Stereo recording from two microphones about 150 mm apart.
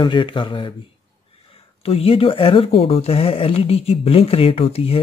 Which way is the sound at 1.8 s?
40° left (ahead or behind).